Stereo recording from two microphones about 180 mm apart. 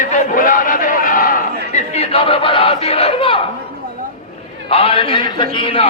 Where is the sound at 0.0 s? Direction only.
45° left (ahead or behind).